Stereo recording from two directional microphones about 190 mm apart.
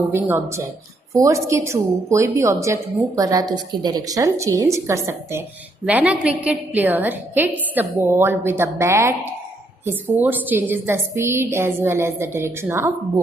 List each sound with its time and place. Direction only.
0.1 s a woman's voice: 15° right (ahead or behind)